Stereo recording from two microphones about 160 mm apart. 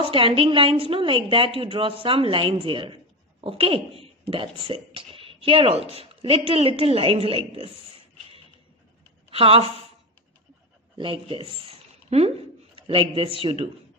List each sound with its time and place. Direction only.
0.0 s a woman's voice: 35° right (ahead or behind)
9.3 s a woman's voice: 35° right (ahead or behind)
11.0 s a woman's voice: 35° right (ahead or behind)
11.7 s a sound: 40° right (ahead or behind)
12.7 s a man's voice: 35° right (ahead or behind)